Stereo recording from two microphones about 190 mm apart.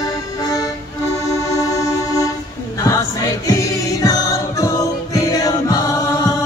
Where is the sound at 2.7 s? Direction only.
15° left (ahead or behind).